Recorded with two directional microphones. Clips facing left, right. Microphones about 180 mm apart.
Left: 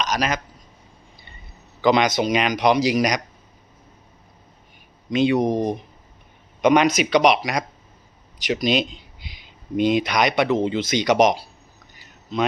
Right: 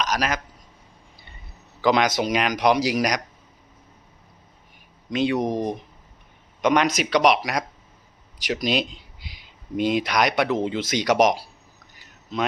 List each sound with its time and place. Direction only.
0.0 s speech: 10° right (ahead or behind)
1.8 s speech: 5° right (ahead or behind)
5.1 s speech: centre (ahead or behind)
6.6 s speech: 5° left (ahead or behind)